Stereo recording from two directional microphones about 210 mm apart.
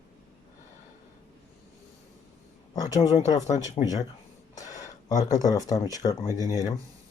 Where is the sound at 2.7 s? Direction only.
15° left (ahead or behind).